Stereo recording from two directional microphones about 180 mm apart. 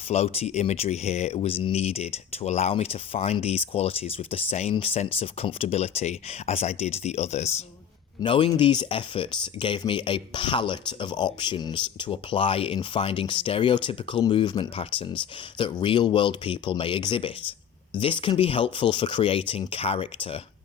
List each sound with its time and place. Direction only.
0.1 s speech: 35° left (ahead or behind)